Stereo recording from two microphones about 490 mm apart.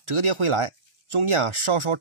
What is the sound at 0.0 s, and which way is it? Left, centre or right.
Speech, right.